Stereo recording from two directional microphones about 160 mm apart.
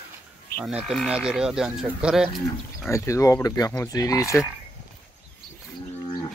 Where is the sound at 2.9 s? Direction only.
20° left (ahead or behind).